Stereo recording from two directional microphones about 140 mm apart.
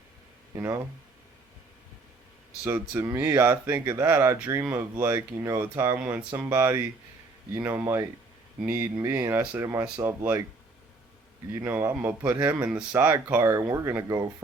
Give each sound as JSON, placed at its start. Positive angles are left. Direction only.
{"t": 0.5, "sound": "speech", "side_deg": -20}
{"t": 2.9, "sound": "speech", "side_deg": -20}
{"t": 11.5, "sound": "speech", "side_deg": -15}